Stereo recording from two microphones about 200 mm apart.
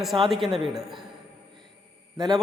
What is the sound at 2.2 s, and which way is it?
Speech, 20° right (ahead or behind).